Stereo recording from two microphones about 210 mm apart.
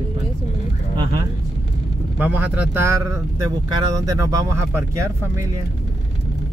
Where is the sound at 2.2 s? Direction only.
5° right (ahead or behind).